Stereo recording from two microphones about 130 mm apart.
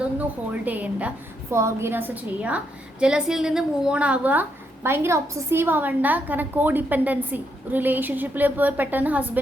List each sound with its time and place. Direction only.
0.0 s a woman's voice: 10° right (ahead or behind)